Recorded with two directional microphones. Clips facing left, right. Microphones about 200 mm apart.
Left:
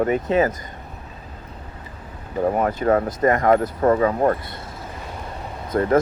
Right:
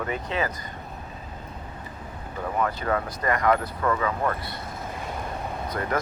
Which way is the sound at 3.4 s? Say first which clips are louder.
Left 5 dB; 45° left (ahead or behind).